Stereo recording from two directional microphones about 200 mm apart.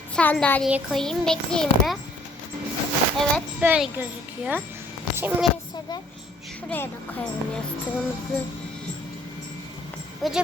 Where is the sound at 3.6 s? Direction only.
10° right (ahead or behind).